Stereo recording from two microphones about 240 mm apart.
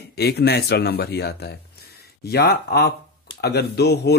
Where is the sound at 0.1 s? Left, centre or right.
Left.